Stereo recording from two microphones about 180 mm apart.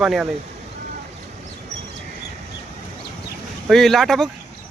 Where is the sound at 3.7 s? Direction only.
Centre (ahead or behind).